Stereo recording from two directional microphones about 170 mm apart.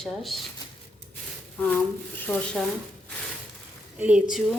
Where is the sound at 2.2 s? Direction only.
5° left (ahead or behind).